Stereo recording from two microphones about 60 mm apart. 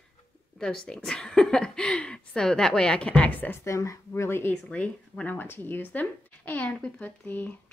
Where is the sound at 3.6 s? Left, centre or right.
Left.